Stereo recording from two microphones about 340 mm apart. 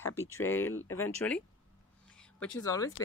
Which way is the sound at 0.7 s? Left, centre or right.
Left.